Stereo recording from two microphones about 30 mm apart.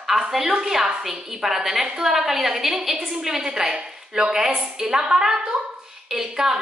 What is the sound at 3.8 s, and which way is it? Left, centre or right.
A woman's voice, right.